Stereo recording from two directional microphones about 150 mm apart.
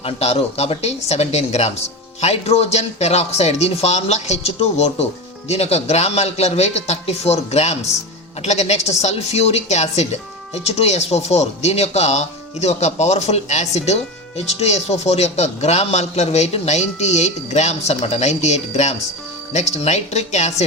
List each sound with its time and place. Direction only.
0.0 s a woman's voice: 45° left (ahead or behind)